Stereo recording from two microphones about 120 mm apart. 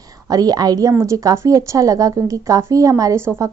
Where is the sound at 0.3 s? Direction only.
30° right (ahead or behind).